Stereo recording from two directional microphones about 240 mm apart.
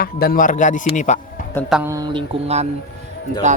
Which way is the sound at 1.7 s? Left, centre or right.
Centre.